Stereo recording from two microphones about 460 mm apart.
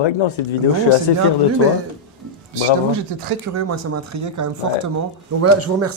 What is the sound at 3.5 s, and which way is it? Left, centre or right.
Speech, right.